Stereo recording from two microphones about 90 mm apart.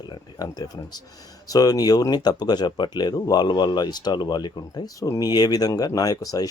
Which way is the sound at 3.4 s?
55° left (ahead or behind).